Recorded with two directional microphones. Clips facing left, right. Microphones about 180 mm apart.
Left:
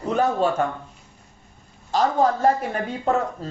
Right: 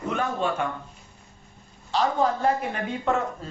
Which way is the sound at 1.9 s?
40° left (ahead or behind).